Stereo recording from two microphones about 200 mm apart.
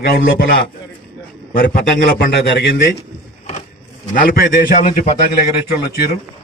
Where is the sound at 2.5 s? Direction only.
55° left (ahead or behind).